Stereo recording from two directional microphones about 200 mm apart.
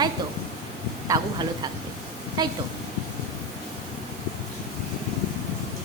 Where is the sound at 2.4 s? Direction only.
20° right (ahead or behind).